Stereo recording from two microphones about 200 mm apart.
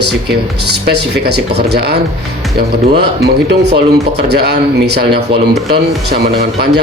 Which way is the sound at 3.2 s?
55° right (ahead or behind).